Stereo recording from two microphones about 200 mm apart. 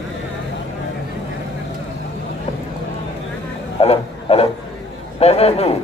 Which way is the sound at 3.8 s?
30° left (ahead or behind).